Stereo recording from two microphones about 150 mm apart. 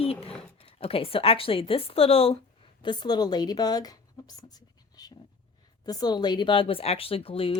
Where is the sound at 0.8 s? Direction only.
40° left (ahead or behind).